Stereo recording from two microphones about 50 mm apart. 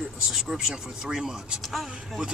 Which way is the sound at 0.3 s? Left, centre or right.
Centre.